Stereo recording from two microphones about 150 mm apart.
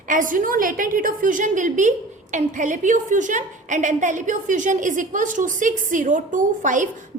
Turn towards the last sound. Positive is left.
turn(degrees=-60)  # may be behind; listen again after turning